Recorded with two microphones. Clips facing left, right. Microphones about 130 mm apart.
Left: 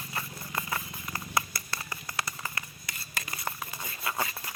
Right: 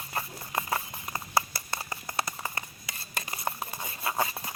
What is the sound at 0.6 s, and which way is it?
Clip-clop, 30° right (ahead or behind).